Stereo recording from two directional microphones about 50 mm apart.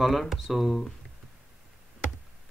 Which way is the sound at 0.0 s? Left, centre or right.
Centre.